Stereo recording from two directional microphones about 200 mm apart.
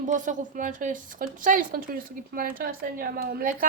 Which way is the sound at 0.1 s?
40° right (ahead or behind).